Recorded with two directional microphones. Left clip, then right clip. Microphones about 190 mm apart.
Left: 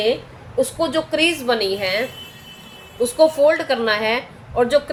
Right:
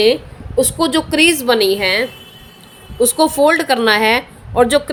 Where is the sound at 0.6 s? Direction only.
60° right (ahead or behind).